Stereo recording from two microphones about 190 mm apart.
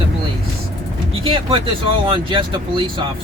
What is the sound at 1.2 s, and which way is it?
Speech, 25° right (ahead or behind).